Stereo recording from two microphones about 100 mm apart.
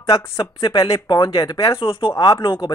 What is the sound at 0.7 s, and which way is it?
Speech, 35° left (ahead or behind).